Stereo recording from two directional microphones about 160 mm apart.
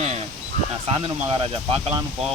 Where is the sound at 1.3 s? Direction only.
35° right (ahead or behind).